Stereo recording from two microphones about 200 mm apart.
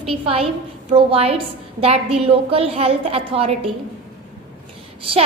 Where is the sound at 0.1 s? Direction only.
30° right (ahead or behind).